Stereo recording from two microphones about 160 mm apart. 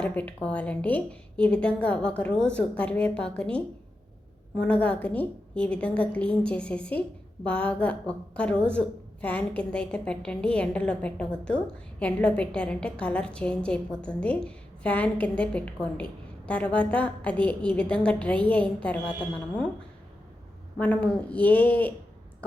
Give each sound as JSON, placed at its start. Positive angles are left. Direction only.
{"t": 0.0, "sound": "a woman's voice", "side_deg": 10}
{"t": 20.7, "sound": "a woman's voice", "side_deg": 10}